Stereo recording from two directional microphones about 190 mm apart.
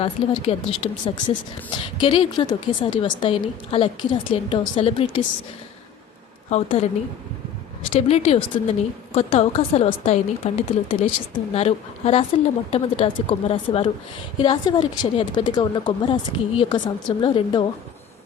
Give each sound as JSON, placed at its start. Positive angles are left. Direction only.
{"t": 0.0, "sound": "speech", "side_deg": 30}
{"t": 6.5, "sound": "speech", "side_deg": 35}
{"t": 7.9, "sound": "speech", "side_deg": 35}